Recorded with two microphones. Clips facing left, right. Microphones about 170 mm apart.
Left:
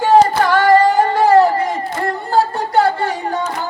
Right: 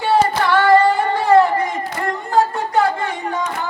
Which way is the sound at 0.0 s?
40° left (ahead or behind).